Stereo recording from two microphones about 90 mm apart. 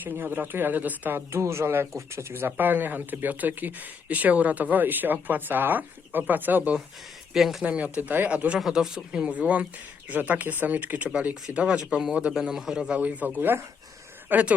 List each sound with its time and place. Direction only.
0.0 s speech: 20° right (ahead or behind)
7.3 s speech: centre (ahead or behind)
7.6 s speech: 15° right (ahead or behind)
13.0 s speech: 15° right (ahead or behind)